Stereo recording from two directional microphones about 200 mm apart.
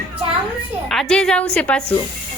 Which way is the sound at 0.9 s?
Centre (ahead or behind).